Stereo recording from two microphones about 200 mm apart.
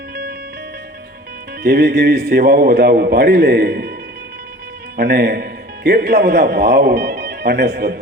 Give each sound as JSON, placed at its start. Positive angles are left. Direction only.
{"t": 1.6, "sound": "a man's voice", "side_deg": -55}
{"t": 4.9, "sound": "a man's voice", "side_deg": -55}